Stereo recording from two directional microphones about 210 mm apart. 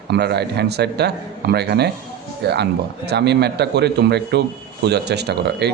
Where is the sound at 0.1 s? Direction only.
50° right (ahead or behind).